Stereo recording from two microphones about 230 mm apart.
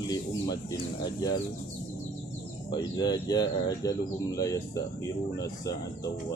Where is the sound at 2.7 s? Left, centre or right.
Centre.